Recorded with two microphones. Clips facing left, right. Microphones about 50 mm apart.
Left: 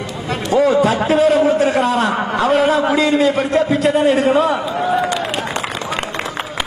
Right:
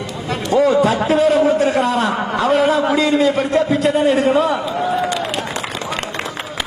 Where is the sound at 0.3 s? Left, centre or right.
Centre.